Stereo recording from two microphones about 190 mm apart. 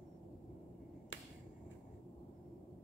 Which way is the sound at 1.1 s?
75° left (ahead or behind).